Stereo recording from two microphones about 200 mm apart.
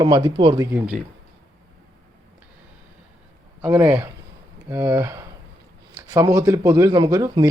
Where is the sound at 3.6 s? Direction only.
10° right (ahead or behind).